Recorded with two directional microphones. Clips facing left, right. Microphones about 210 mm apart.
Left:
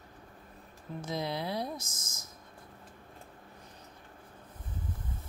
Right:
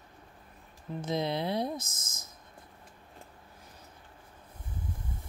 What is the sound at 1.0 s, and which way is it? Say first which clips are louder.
Speech: right 4 dB; 20° right (ahead or behind).